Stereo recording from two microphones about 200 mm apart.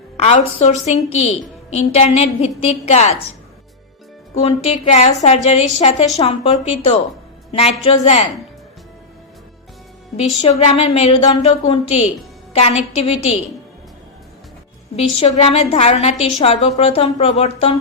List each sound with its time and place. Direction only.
0.2 s a woman's voice: 35° left (ahead or behind)
4.4 s a woman's voice: 30° left (ahead or behind)
10.2 s a woman's voice: 30° left (ahead or behind)
15.2 s a woman's voice: 30° left (ahead or behind)